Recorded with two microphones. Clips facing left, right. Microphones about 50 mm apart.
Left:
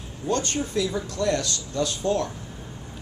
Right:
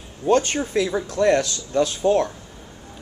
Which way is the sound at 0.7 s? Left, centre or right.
Right.